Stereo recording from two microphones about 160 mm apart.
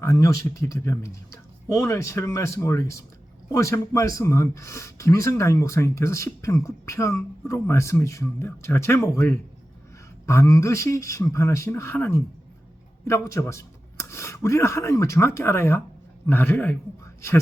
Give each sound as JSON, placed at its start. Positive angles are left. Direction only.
{"t": 0.0, "sound": "speech", "side_deg": 20}